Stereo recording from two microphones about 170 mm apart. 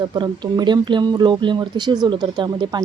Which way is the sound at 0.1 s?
25° right (ahead or behind).